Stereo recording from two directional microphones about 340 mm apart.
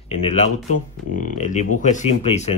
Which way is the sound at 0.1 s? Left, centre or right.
Centre.